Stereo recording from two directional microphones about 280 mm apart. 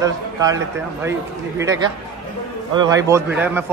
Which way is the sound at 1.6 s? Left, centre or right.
Centre.